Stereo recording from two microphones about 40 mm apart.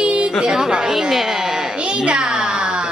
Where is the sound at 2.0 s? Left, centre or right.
Right.